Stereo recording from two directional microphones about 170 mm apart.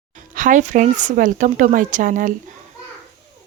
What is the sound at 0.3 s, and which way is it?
Speech, 50° right (ahead or behind).